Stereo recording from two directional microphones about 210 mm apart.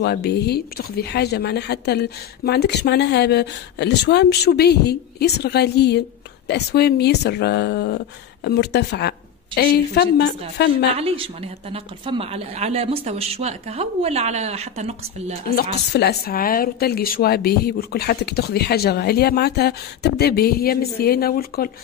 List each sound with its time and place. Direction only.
0.0 s speech: 50° left (ahead or behind)
11.0 s a woman's voice: 30° right (ahead or behind)
15.5 s speech: 50° left (ahead or behind)